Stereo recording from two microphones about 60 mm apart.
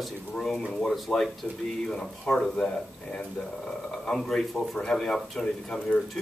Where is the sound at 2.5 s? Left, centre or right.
Centre.